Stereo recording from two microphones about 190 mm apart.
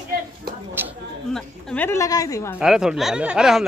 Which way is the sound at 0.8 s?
10° right (ahead or behind).